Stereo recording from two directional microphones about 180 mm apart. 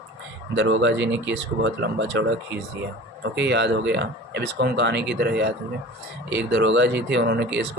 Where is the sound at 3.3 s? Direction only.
75° right (ahead or behind).